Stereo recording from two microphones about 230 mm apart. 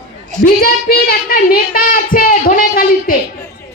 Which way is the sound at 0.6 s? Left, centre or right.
Left.